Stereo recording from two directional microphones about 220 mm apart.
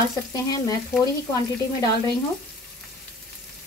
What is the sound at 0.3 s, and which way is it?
Speech, 15° left (ahead or behind).